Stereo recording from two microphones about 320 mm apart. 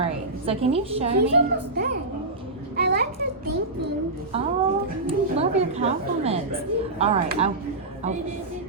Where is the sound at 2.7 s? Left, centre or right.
Right.